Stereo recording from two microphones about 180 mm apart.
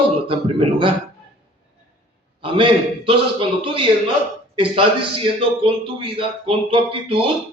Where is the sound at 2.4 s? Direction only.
30° right (ahead or behind).